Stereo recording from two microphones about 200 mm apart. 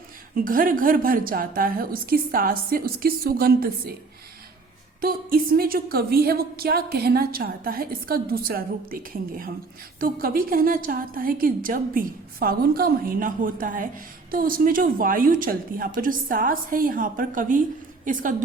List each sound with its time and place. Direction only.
0.3 s a woman's voice: 45° right (ahead or behind)
4.9 s a woman's voice: 45° right (ahead or behind)